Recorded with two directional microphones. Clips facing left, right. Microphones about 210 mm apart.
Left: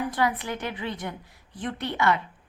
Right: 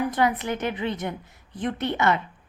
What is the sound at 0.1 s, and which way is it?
A woman's voice, 20° right (ahead or behind).